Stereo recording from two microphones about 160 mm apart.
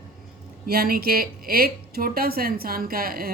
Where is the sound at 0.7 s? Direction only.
70° right (ahead or behind).